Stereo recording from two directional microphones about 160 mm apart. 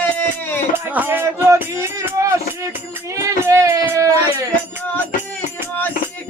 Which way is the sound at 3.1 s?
20° right (ahead or behind).